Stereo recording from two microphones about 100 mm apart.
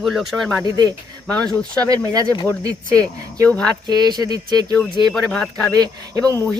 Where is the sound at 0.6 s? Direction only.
45° right (ahead or behind).